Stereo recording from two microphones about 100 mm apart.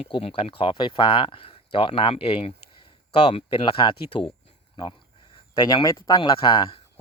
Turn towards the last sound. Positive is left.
turn(degrees=50)  # may be behind; listen again after turning